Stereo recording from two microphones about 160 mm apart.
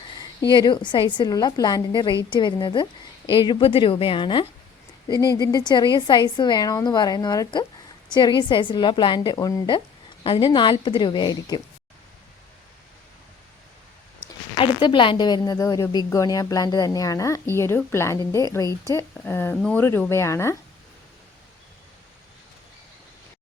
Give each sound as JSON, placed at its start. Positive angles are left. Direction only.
{"t": 0.2, "sound": "a woman's voice", "side_deg": 25}
{"t": 14.5, "sound": "a woman's voice", "side_deg": 30}